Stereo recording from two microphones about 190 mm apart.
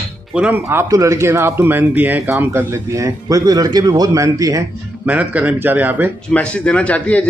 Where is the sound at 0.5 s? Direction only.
15° right (ahead or behind).